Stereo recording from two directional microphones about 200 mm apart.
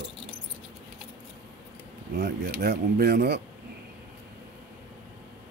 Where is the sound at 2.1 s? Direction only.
55° right (ahead or behind).